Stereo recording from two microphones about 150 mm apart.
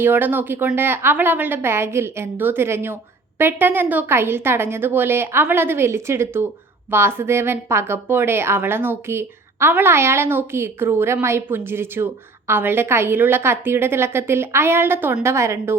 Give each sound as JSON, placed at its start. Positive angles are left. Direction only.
{"t": 0.0, "sound": "a woman's voice", "side_deg": -15}